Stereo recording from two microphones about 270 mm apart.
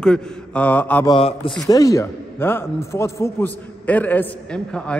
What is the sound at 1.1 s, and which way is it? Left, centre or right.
A man's voice, centre.